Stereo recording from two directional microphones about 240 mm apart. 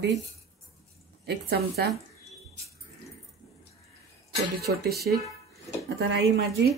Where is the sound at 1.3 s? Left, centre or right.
Right.